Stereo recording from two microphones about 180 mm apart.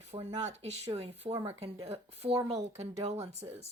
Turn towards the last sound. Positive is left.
turn(degrees=-35)  # may be behind; listen again after turning